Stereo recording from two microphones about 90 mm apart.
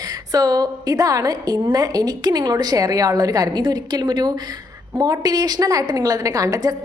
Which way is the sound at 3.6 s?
55° right (ahead or behind).